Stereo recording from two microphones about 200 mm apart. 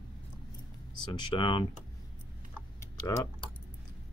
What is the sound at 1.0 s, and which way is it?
Speech, 25° left (ahead or behind).